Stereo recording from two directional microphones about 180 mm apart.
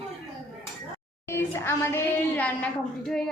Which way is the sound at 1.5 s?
15° left (ahead or behind).